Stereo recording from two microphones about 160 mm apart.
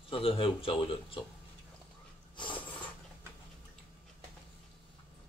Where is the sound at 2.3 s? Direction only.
30° left (ahead or behind).